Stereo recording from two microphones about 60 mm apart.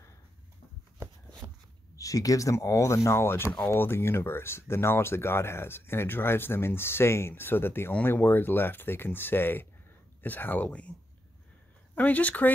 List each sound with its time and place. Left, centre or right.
1.4 s a sound: right
2.0 s speech: left
11.9 s speech: left